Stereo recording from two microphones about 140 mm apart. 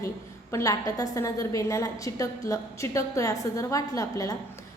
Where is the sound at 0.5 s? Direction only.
25° left (ahead or behind).